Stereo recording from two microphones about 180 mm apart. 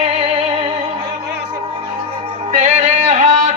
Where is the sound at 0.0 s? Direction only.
35° right (ahead or behind).